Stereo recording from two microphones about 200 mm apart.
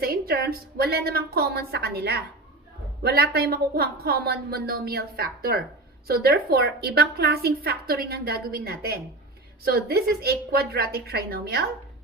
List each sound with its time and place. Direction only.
0.0 s a woman's voice: 50° right (ahead or behind)